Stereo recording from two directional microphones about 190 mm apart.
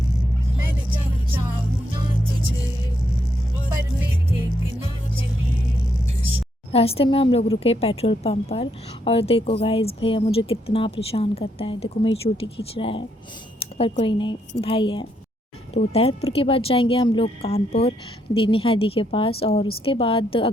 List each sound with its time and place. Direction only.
6.7 s a woman's voice: 30° left (ahead or behind)